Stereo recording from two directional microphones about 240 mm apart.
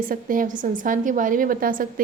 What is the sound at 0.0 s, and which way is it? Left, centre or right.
A woman's voice, right.